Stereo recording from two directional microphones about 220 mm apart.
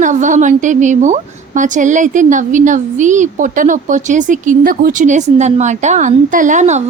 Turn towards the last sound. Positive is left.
turn(degrees=-35)  # may be behind; listen again after turning